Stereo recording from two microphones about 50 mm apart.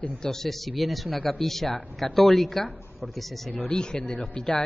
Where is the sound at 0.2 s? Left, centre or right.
Centre.